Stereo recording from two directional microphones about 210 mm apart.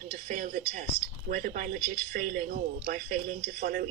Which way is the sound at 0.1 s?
40° right (ahead or behind).